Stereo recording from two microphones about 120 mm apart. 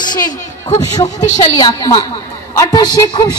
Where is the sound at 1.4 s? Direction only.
30° left (ahead or behind).